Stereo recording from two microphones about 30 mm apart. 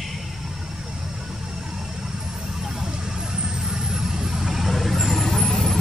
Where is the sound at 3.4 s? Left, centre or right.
Centre.